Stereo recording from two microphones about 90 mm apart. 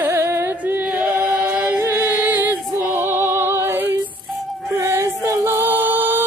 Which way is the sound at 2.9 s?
20° right (ahead or behind).